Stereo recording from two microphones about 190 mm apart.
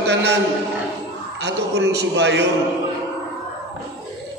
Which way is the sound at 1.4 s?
60° right (ahead or behind).